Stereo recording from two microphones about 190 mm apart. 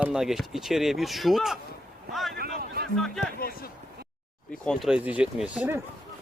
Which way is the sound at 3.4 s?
50° left (ahead or behind).